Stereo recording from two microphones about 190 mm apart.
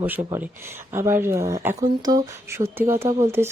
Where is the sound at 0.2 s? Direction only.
30° right (ahead or behind).